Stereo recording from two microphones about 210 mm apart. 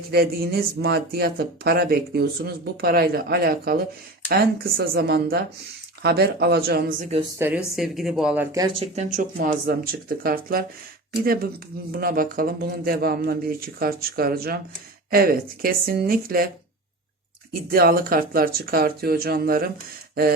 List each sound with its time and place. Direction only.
0.1 s speech: 50° right (ahead or behind)
7.2 s speech: 10° right (ahead or behind)
8.5 s speech: 25° right (ahead or behind); by 10.7 s 45° right (ahead or behind)
11.9 s speech: 45° right (ahead or behind)
17.7 s speech: 45° right (ahead or behind)